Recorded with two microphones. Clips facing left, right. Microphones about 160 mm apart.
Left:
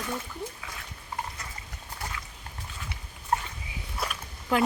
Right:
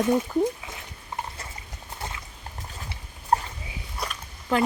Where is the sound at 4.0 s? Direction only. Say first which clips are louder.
Even; 5° left (ahead or behind).